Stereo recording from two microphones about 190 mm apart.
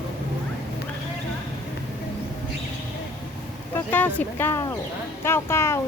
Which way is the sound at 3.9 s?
10° left (ahead or behind).